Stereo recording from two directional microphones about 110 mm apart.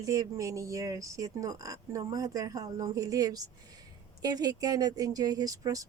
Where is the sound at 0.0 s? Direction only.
30° right (ahead or behind).